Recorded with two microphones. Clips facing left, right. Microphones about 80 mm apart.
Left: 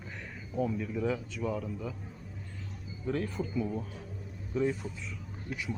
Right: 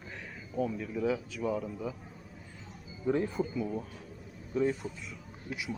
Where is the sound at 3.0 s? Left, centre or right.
Centre.